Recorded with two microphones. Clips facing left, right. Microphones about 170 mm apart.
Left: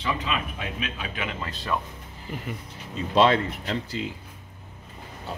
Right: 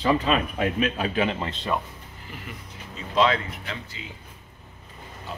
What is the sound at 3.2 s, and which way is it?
Speech, 35° left (ahead or behind).